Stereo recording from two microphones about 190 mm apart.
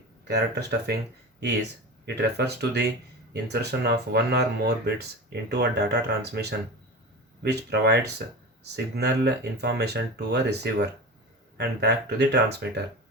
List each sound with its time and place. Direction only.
0.3 s speech: 60° right (ahead or behind)
2.0 s speech: 60° right (ahead or behind)